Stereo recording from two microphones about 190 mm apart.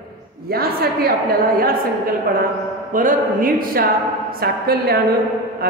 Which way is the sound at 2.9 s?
45° right (ahead or behind).